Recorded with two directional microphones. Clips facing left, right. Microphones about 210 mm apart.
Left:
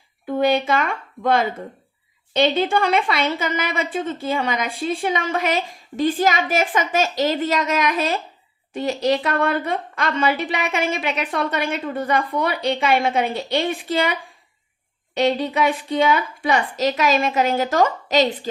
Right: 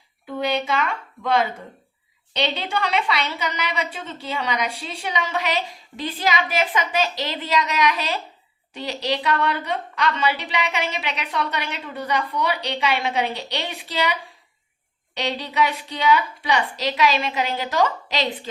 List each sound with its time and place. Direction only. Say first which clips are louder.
0.3 s a woman's voice: left 5 dB; 50° left (ahead or behind)